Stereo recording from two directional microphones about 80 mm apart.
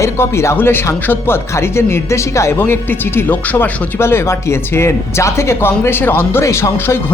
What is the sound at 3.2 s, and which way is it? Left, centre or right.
Speech, left.